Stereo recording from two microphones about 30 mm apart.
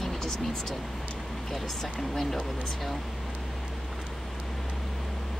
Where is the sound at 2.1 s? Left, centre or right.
Centre.